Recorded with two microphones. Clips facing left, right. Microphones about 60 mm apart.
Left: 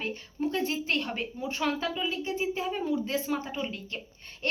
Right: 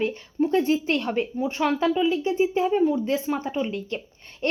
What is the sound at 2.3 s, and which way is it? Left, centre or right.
A woman's voice, right.